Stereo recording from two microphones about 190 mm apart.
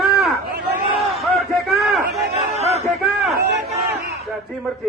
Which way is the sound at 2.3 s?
35° right (ahead or behind).